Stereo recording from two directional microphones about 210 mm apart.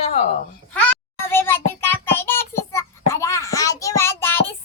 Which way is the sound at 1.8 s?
10° left (ahead or behind).